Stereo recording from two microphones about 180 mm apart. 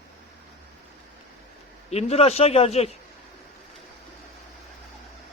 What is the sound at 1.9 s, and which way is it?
A man's voice, 35° left (ahead or behind).